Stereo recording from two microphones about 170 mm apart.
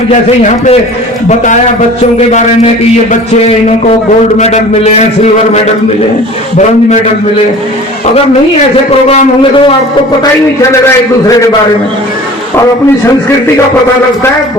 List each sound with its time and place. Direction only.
0.1 s a man's voice: 45° left (ahead or behind)
4.4 s a man's voice: 40° left (ahead or behind)
9.0 s a man's voice: 35° left (ahead or behind)